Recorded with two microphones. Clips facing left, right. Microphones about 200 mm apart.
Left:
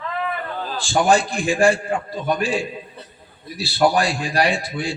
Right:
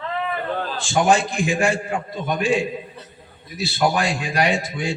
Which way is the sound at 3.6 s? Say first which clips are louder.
Left 3 dB; 35° left (ahead or behind).